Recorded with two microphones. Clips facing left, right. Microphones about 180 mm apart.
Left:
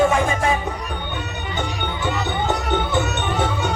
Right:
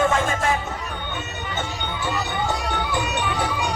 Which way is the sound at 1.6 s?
20° left (ahead or behind).